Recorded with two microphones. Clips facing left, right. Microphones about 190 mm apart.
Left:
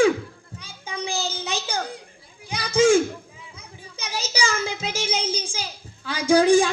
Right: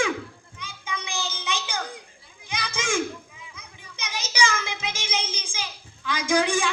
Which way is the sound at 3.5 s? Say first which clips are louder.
Left 4 dB; 30° left (ahead or behind).